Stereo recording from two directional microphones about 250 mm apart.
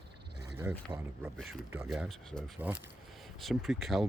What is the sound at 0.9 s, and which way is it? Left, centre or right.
Speech, centre.